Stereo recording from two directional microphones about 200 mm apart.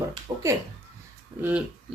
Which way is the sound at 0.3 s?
20° right (ahead or behind).